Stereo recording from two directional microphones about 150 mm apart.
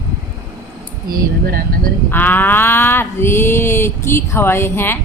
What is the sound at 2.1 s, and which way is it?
Cattle, 15° left (ahead or behind).